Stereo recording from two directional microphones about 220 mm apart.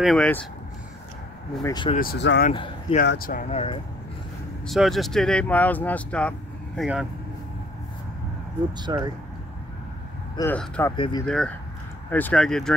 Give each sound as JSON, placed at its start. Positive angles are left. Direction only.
{"t": 0.0, "sound": "speech", "side_deg": 5}
{"t": 1.6, "sound": "speech", "side_deg": 20}
{"t": 2.0, "sound": "speech", "side_deg": 45}
{"t": 2.5, "sound": "speech", "side_deg": 20}
{"t": 3.0, "sound": "speech", "side_deg": 40}
{"t": 4.6, "sound": "speech", "side_deg": 0}
{"t": 8.8, "sound": "speech", "side_deg": -20}
{"t": 10.3, "sound": "speech", "side_deg": 10}
{"t": 11.0, "sound": "speech", "side_deg": 20}
{"t": 11.2, "sound": "speech", "side_deg": 5}